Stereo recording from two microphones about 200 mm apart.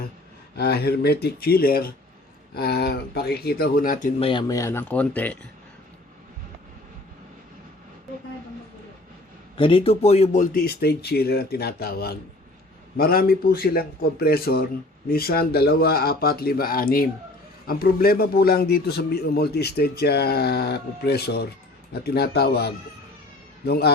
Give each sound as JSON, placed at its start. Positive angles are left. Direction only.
{"t": 0.5, "sound": "a man's voice", "side_deg": 55}
{"t": 4.2, "sound": "speech", "side_deg": 25}
{"t": 9.6, "sound": "a man's voice", "side_deg": 25}